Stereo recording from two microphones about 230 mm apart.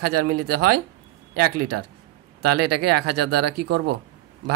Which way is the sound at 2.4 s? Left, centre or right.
Right.